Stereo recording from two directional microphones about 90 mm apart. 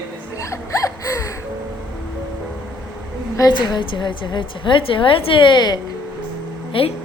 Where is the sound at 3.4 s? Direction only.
50° left (ahead or behind).